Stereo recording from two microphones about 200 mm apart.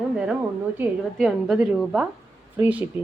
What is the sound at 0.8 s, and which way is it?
A woman's voice, centre (ahead or behind).